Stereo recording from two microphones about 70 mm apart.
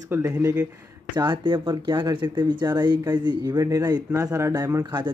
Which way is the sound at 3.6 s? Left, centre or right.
Right.